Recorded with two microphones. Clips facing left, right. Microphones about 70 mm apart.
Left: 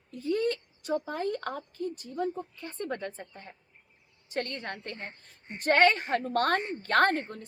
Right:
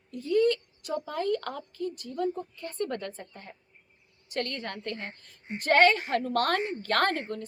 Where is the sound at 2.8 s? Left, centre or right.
Centre.